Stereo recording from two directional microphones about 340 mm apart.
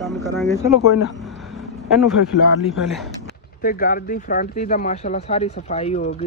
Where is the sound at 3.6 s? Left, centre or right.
Left.